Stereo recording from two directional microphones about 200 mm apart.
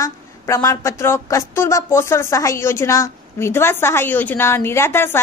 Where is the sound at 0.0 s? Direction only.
15° left (ahead or behind).